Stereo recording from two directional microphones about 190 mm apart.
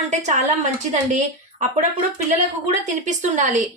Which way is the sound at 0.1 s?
40° right (ahead or behind).